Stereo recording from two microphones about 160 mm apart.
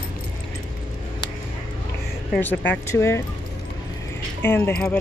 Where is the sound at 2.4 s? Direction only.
15° left (ahead or behind).